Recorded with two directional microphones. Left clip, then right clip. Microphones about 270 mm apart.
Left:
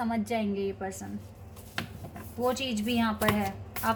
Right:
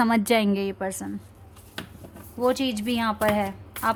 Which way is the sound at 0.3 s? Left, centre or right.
Right.